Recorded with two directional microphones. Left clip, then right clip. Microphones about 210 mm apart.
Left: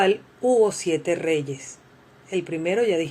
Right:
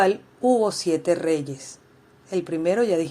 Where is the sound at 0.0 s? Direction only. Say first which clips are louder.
Even; 25° right (ahead or behind).